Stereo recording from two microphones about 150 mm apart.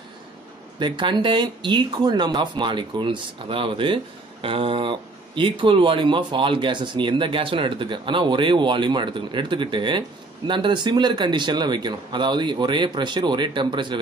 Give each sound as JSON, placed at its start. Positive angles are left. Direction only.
{"t": 0.7, "sound": "speech", "side_deg": -30}